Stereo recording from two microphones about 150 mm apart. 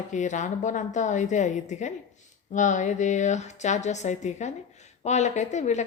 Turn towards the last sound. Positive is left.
turn(degrees=50)  # may be behind; listen again after turning